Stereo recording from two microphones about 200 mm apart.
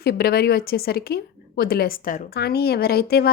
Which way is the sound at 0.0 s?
50° left (ahead or behind).